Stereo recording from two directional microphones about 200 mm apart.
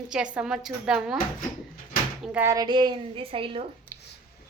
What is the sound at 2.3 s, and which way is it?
A woman's voice, 10° right (ahead or behind).